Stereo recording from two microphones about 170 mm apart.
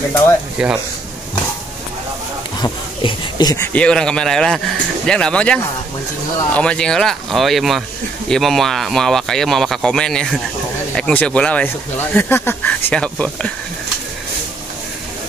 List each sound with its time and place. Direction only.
0.6 s speech: 5° right (ahead or behind)
2.6 s speech: 30° left (ahead or behind)
3.7 s speech: 5° left (ahead or behind)